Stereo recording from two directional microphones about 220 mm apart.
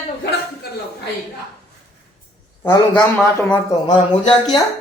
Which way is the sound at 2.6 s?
10° left (ahead or behind).